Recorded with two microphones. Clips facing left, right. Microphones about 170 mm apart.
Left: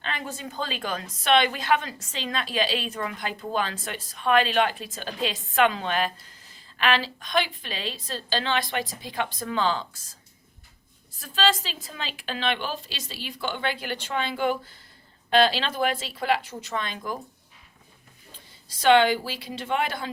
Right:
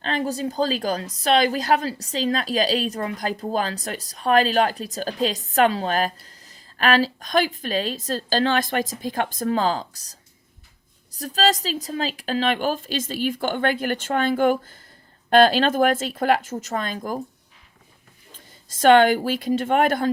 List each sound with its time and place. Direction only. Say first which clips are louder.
0.0 s a woman's voice: right 9 dB; 40° right (ahead or behind)
18.3 s a woman's voice: right 2 dB; 45° right (ahead or behind)